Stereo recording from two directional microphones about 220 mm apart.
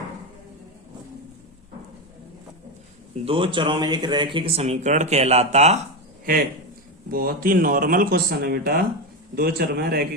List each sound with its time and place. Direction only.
3.2 s speech: 25° right (ahead or behind)
7.1 s a man's voice: 40° right (ahead or behind)